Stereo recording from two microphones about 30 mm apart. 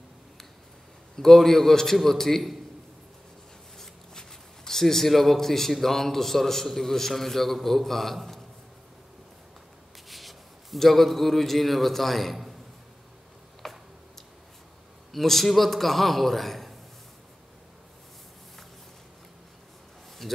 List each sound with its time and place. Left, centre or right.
1.1 s a man's voice: centre
3.7 s speech: centre
10.0 s a man's voice: centre
13.6 s tick-tock: centre
15.1 s a man's voice: centre
20.2 s a sound: centre